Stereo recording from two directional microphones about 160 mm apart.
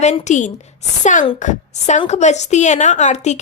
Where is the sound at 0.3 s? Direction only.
50° left (ahead or behind).